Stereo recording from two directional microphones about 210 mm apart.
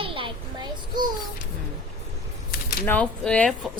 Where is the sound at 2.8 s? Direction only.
5° left (ahead or behind).